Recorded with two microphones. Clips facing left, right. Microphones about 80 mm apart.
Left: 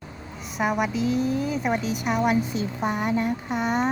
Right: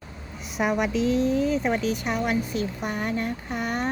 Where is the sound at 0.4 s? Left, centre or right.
Centre.